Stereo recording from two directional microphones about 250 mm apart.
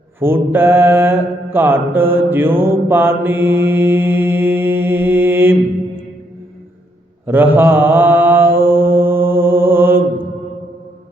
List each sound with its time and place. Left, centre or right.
0.2 s mantra: centre
7.3 s mantra: centre